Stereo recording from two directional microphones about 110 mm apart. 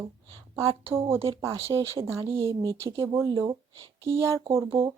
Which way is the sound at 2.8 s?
30° right (ahead or behind).